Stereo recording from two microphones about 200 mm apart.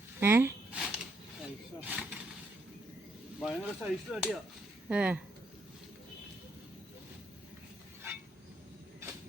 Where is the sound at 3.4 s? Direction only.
Centre (ahead or behind).